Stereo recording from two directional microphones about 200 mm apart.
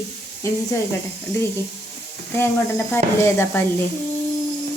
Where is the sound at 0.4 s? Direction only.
15° left (ahead or behind).